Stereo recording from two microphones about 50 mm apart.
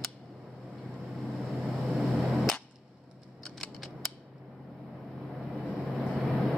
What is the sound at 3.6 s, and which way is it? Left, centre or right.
Scissors, centre.